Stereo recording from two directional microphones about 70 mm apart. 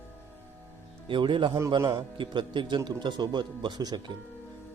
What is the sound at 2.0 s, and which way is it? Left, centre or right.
Speech, right.